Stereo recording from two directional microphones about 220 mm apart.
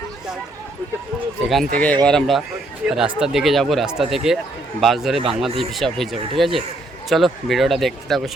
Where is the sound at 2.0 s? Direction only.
Centre (ahead or behind).